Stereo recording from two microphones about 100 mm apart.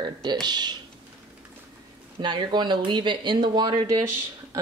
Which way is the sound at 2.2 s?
50° right (ahead or behind).